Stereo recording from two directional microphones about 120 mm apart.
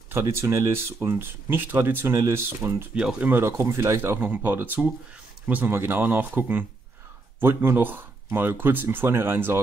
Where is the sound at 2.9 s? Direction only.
10° right (ahead or behind).